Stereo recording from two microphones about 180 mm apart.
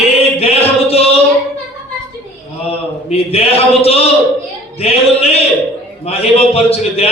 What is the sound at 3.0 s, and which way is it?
A man's voice, 35° left (ahead or behind).